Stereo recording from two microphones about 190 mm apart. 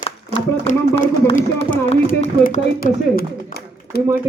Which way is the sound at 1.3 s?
35° left (ahead or behind).